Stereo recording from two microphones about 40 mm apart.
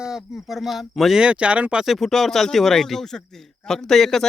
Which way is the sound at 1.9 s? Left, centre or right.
Centre.